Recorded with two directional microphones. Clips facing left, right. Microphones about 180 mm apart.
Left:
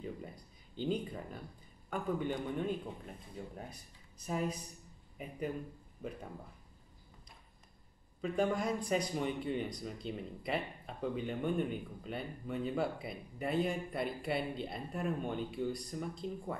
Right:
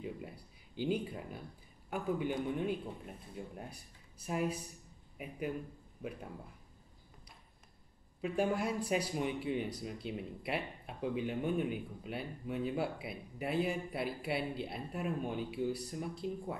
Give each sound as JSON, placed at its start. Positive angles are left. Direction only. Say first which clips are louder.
{"t": 0.7, "sound": "speech", "louder": "right 1 dB", "side_deg": -5}
{"t": 8.2, "sound": "a man's voice", "louder": "even", "side_deg": -5}